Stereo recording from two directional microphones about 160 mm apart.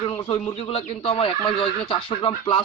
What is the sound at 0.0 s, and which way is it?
Speech, 35° left (ahead or behind).